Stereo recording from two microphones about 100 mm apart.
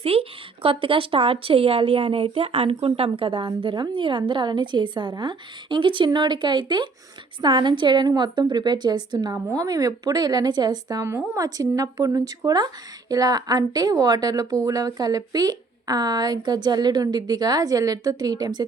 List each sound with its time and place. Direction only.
0.0 s a woman's voice: 75° right (ahead or behind); by 18.6 s 45° right (ahead or behind)